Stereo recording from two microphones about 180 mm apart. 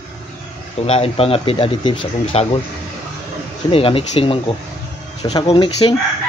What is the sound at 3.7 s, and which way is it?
Speech, 30° left (ahead or behind).